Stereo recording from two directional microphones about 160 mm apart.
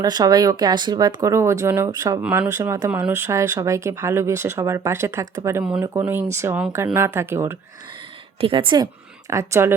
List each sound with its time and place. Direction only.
0.0 s speech: 25° right (ahead or behind)
2.2 s speech: 5° right (ahead or behind)
2.5 s speech: 20° right (ahead or behind)
8.4 s speech: 35° right (ahead or behind)
9.3 s speech: 20° right (ahead or behind)